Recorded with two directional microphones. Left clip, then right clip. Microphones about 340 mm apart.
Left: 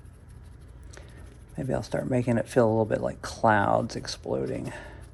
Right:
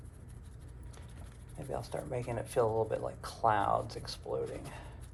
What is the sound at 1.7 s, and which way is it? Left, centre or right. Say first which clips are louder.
Speech: left 10 dB; left.